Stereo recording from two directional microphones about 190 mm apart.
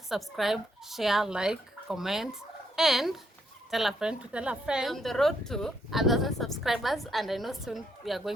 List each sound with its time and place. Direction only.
0.1 s a woman's voice: centre (ahead or behind)